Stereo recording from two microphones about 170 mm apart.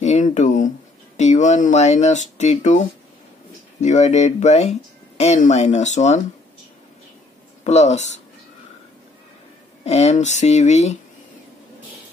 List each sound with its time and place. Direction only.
0.0 s speech: 40° left (ahead or behind)
3.8 s speech: 45° left (ahead or behind)
7.6 s speech: 40° left (ahead or behind)
9.8 s speech: 40° left (ahead or behind)